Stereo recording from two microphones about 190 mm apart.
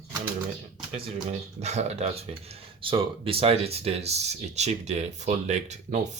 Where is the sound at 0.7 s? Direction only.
30° right (ahead or behind).